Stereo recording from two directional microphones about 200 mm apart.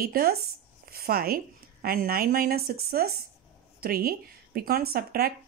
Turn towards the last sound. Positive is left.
turn(degrees=-50)  # may be behind; listen again after turning